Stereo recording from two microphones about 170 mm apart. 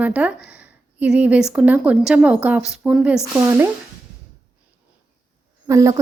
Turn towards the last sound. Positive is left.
turn(degrees=-20)  # may be behind; listen again after turning